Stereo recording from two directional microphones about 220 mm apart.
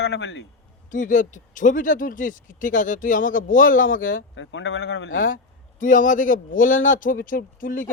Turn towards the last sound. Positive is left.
turn(degrees=40)  # may be behind; listen again after turning